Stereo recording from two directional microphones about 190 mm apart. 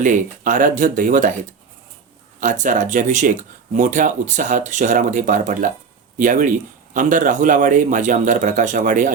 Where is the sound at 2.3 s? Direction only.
45° right (ahead or behind).